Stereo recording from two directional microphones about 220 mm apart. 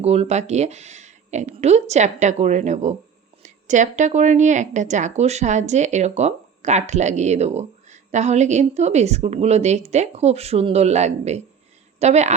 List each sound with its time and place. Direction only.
0.0 s a woman's voice: 30° right (ahead or behind)